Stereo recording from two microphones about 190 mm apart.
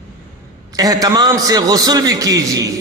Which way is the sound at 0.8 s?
20° right (ahead or behind).